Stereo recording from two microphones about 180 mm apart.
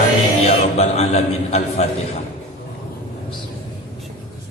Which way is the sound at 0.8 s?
35° left (ahead or behind).